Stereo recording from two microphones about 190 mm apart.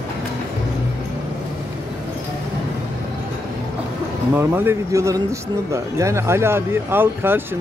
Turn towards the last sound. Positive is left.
turn(degrees=-10)  # may be behind; listen again after turning